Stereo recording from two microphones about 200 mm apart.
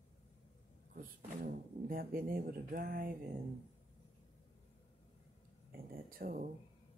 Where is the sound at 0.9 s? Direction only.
45° right (ahead or behind).